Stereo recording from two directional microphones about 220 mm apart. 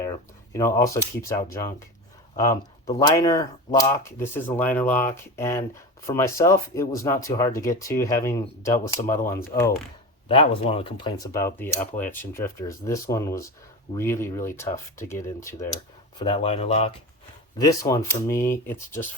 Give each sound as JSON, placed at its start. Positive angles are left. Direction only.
{"t": 0.0, "sound": "speech", "side_deg": 15}
{"t": 10.2, "sound": "speech", "side_deg": 25}
{"t": 16.1, "sound": "speech", "side_deg": 25}
{"t": 17.6, "sound": "speech", "side_deg": 15}